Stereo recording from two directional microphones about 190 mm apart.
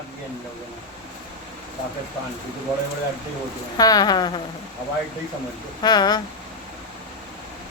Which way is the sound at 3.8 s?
20° left (ahead or behind).